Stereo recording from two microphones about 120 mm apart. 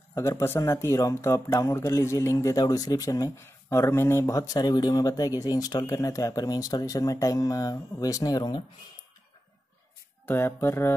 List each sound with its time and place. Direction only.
0.1 s speech: 25° left (ahead or behind)
10.2 s speech: 20° left (ahead or behind)